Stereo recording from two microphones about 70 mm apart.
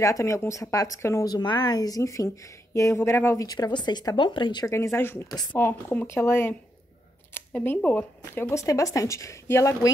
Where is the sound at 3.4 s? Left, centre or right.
Left.